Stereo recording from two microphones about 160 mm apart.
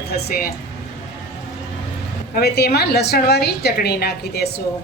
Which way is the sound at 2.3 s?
75° left (ahead or behind).